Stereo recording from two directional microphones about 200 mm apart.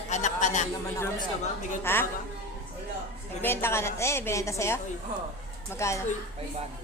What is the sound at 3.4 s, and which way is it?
Speech, 10° left (ahead or behind).